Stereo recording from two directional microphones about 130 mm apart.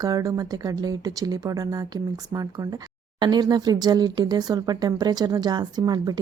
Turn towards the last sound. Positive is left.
turn(degrees=-30)  # may be behind; listen again after turning